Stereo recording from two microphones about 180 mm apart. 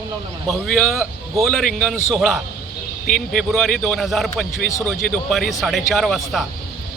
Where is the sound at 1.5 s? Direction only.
5° left (ahead or behind).